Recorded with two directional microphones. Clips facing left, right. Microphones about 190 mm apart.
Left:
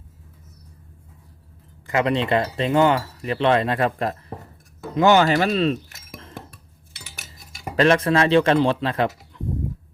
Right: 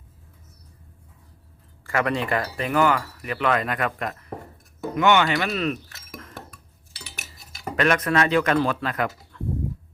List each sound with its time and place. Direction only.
1.9 s speech: 20° left (ahead or behind)
5.9 s dishes: 25° left (ahead or behind)
7.6 s speech: 30° left (ahead or behind)